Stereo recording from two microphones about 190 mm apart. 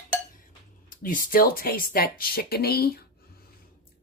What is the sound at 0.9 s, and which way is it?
Speech, 50° left (ahead or behind).